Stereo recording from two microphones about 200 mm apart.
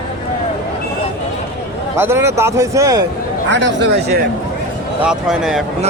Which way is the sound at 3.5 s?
60° right (ahead or behind).